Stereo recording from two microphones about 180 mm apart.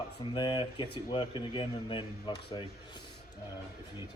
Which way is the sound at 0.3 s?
25° left (ahead or behind).